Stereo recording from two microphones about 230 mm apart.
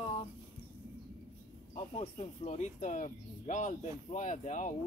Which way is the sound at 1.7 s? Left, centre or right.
Left.